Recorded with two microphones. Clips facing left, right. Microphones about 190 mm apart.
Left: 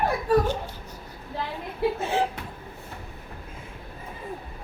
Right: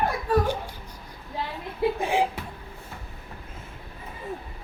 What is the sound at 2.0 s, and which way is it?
Speech, 15° right (ahead or behind).